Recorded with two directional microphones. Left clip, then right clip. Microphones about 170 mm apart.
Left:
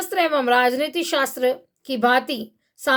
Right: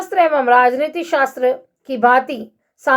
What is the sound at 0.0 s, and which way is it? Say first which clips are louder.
Speech: right 6 dB; 35° left (ahead or behind).